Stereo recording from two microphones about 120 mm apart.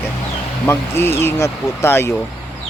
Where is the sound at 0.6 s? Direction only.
20° left (ahead or behind).